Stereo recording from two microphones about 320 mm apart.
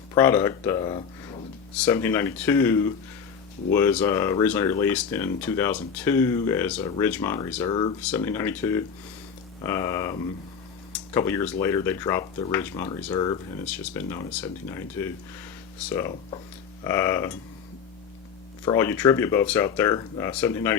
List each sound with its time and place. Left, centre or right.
0.1 s speech: centre
18.6 s speech: centre